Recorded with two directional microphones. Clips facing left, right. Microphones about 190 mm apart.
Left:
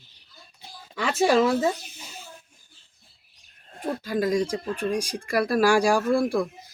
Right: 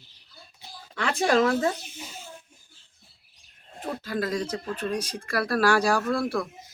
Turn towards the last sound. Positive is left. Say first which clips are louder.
# left 4 dB
turn(degrees=10)  # may be behind; listen again after turning